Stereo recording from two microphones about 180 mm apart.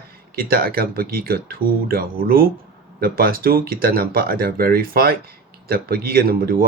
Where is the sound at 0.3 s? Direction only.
55° right (ahead or behind).